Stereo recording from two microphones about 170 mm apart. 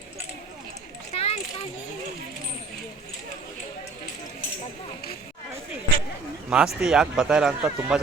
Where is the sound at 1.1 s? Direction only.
35° left (ahead or behind).